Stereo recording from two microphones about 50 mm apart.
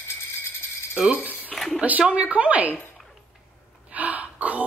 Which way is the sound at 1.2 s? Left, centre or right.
Left.